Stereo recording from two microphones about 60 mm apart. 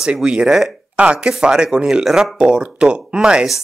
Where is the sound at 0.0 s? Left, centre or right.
Centre.